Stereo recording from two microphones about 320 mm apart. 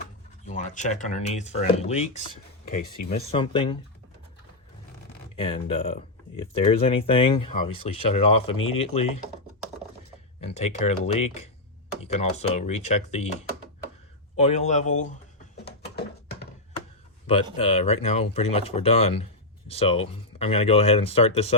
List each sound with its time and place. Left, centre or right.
0.4 s speech: left
3.3 s speech: centre
5.4 s speech: centre
10.4 s speech: centre
14.3 s speech: left
15.5 s a sound: left
17.2 s speech: centre